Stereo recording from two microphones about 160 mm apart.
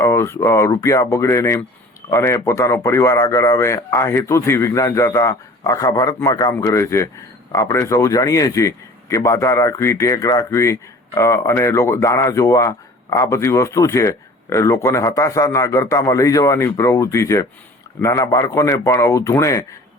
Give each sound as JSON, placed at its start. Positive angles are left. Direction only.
{"t": 0.0, "sound": "a man's voice", "side_deg": 15}